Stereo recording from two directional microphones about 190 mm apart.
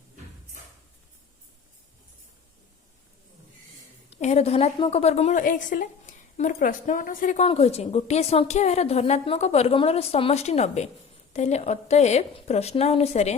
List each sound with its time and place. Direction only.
4.1 s a woman's voice: 35° left (ahead or behind)
7.4 s a woman's voice: 30° left (ahead or behind)